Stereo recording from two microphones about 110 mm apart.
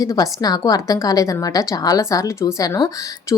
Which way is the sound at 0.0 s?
35° left (ahead or behind).